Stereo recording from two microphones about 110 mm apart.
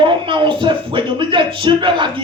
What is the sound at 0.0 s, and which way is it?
A man's voice, 50° right (ahead or behind).